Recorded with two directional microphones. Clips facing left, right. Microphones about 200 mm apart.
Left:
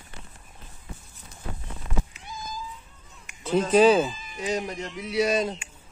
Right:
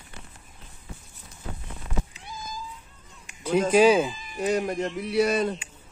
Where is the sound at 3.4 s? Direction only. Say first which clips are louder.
Even; 10° right (ahead or behind).